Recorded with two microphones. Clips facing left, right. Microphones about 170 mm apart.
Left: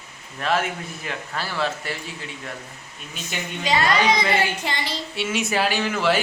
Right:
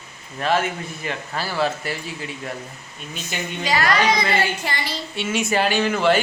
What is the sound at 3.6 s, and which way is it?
Speech, 20° left (ahead or behind).